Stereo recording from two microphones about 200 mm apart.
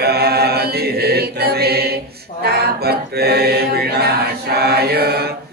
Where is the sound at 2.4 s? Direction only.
50° right (ahead or behind).